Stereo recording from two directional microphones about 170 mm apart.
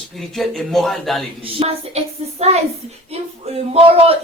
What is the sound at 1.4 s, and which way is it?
Speech, 35° right (ahead or behind).